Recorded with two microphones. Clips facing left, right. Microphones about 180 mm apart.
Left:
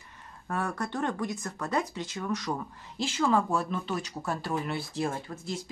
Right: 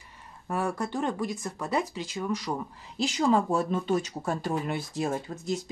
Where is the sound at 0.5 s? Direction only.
10° right (ahead or behind).